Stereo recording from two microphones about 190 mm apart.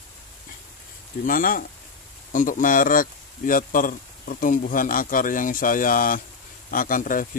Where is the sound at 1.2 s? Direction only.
45° left (ahead or behind).